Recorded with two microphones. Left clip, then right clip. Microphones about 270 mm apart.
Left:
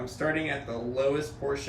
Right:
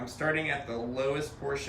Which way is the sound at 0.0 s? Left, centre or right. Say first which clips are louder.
Left 1 dB; centre.